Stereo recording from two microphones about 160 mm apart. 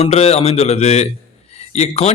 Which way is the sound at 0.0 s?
40° left (ahead or behind).